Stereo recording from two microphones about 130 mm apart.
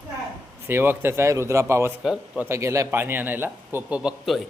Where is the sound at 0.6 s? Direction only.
15° right (ahead or behind).